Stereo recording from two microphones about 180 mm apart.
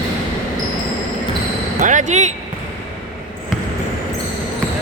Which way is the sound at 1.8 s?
45° right (ahead or behind).